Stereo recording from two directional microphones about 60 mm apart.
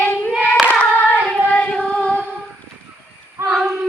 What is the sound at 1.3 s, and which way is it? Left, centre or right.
Female singing, left.